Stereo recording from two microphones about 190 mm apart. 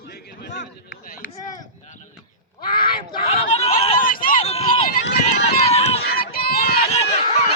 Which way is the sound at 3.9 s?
45° left (ahead or behind).